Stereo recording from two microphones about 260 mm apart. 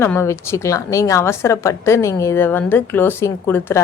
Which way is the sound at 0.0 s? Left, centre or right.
Centre.